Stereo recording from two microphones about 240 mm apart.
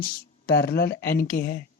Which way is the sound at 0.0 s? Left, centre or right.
Left.